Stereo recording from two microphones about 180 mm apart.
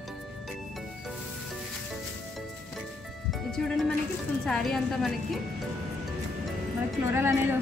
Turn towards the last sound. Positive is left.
turn(degrees=-15)  # may be behind; listen again after turning